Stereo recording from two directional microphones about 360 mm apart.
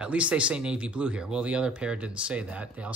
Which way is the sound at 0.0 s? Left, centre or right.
Centre.